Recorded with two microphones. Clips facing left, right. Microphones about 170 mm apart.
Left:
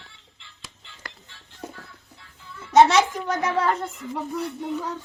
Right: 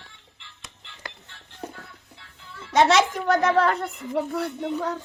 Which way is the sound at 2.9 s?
65° right (ahead or behind).